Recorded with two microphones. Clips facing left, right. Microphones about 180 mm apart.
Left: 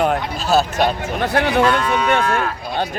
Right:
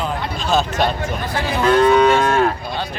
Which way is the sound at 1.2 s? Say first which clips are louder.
Left 8 dB; 65° left (ahead or behind).